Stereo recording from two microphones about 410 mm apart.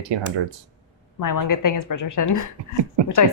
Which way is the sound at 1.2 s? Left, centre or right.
Left.